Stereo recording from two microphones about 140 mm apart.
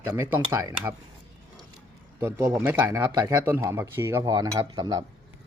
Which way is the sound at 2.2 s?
20° right (ahead or behind).